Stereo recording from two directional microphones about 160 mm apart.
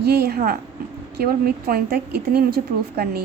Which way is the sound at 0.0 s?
85° right.